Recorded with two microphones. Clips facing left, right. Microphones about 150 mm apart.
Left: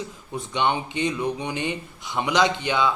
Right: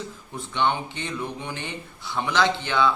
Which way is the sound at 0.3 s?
15° left (ahead or behind).